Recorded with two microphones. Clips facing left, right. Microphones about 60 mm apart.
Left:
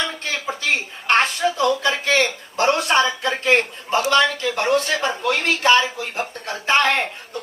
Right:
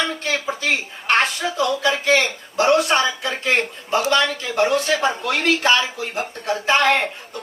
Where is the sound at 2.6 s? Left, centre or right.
Left.